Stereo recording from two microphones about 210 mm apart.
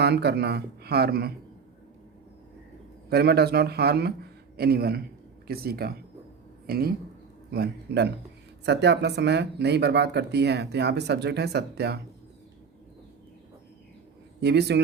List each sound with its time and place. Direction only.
0.0 s speech: 50° right (ahead or behind)
3.1 s a man's voice: 50° right (ahead or behind)
14.4 s speech: 50° right (ahead or behind)